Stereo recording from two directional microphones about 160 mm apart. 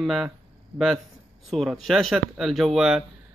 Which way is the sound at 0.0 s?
5° right (ahead or behind).